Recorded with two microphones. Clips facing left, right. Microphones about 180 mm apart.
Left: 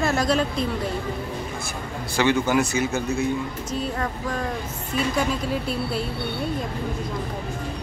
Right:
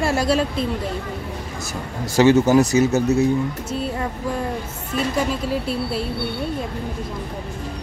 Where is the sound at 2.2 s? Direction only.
40° right (ahead or behind).